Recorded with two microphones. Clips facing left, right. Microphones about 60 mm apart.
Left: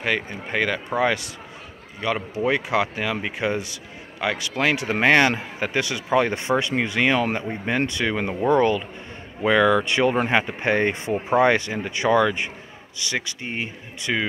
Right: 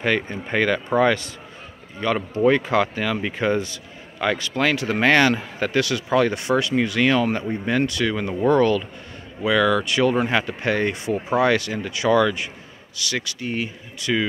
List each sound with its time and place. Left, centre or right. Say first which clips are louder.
0.0 s speech: right 3 dB; centre; by 14.2 s left